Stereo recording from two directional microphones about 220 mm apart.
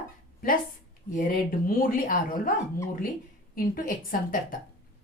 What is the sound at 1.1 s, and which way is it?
Speech, 40° left (ahead or behind).